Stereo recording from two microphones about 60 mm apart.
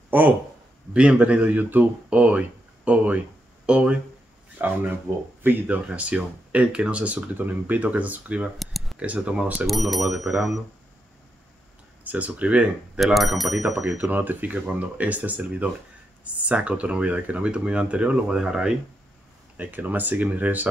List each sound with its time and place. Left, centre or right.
0.1 s speech: right
0.9 s speech: centre
4.6 s speech: right
5.9 s speech: right
7.3 s speech: right
8.5 s a sound: centre
9.0 s speech: right
9.7 s speech: centre
12.0 s speech: right
13.0 s speech: centre
13.7 s speech: right; by 18.7 s centre
19.5 s speech: right